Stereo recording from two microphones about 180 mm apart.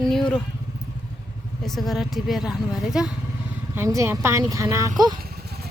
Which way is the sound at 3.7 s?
15° right (ahead or behind).